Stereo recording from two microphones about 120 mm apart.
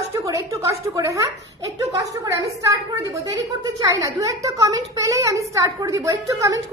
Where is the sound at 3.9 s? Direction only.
30° right (ahead or behind).